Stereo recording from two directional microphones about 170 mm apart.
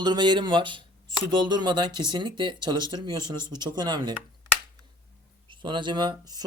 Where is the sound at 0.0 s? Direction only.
25° right (ahead or behind).